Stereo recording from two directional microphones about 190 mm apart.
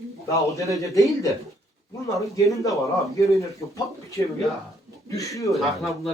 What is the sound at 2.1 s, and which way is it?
A man's voice, 15° left (ahead or behind).